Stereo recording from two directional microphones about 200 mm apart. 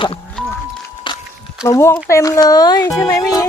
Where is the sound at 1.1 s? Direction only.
25° left (ahead or behind).